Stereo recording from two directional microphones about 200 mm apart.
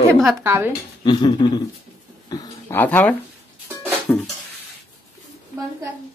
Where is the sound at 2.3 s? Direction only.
10° left (ahead or behind).